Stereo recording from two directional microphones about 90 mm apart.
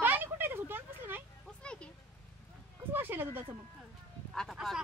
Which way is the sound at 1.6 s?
10° left (ahead or behind).